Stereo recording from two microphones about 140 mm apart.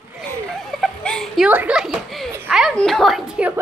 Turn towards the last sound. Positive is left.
turn(degrees=0)  # may be behind; listen again after turning